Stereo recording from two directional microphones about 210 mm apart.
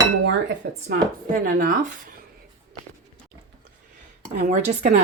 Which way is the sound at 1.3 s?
40° right (ahead or behind).